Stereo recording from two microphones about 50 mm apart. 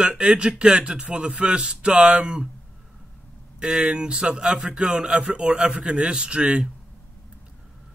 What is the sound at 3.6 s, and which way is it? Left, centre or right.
A man's voice, centre.